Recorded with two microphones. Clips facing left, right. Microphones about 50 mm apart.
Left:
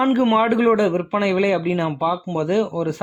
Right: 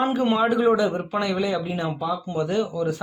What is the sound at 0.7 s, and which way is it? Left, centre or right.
Speech, left.